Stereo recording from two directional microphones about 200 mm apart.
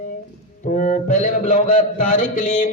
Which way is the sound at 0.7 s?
40° left (ahead or behind).